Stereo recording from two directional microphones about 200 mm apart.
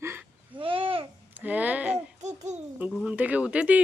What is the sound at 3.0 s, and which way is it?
Speech, 5° right (ahead or behind).